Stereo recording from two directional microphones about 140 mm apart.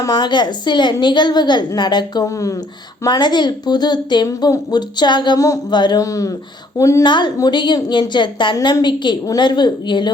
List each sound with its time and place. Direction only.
0.0 s a woman's voice: 30° left (ahead or behind)